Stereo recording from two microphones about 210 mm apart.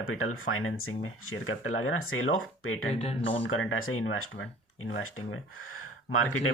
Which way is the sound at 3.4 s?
65° left (ahead or behind).